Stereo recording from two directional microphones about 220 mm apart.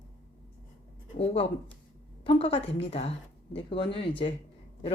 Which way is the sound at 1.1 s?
25° left (ahead or behind).